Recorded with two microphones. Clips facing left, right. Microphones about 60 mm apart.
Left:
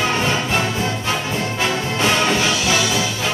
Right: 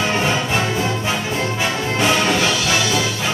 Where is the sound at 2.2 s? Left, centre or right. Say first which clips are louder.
Even; centre.